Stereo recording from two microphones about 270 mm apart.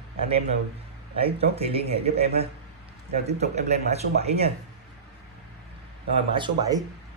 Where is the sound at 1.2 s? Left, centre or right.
Right.